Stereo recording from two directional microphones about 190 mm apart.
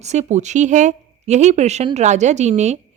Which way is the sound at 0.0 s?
35° right (ahead or behind).